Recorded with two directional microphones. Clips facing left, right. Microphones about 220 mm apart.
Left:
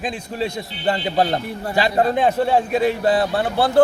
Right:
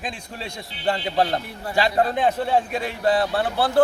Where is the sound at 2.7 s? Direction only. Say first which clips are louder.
Left 5 dB; 5° left (ahead or behind).